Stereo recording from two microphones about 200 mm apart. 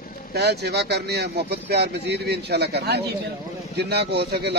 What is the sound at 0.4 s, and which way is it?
Speech, 55° right (ahead or behind).